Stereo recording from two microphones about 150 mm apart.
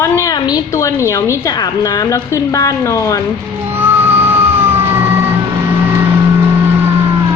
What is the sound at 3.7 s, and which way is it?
Music, 15° right (ahead or behind).